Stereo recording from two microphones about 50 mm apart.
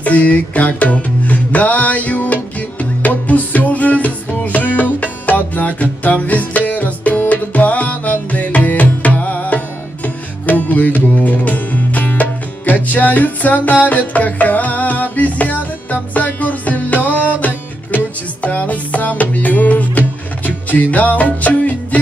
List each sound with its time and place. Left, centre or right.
0.0 s music: left
10.6 s music: left